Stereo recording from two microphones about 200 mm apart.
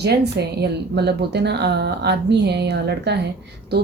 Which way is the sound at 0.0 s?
55° right (ahead or behind).